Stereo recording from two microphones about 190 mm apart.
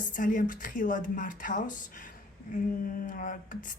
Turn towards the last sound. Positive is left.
turn(degrees=45)  # may be behind; listen again after turning